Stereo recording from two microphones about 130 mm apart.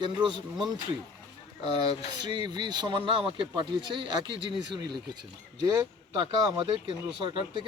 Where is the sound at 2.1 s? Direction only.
35° right (ahead or behind).